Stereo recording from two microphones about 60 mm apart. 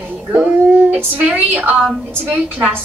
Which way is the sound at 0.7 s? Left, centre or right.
Right.